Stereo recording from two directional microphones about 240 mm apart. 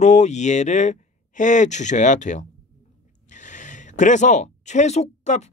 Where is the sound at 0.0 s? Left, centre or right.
Left.